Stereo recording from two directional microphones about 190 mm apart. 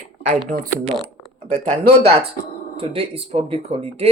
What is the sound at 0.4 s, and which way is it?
Speech, 45° right (ahead or behind).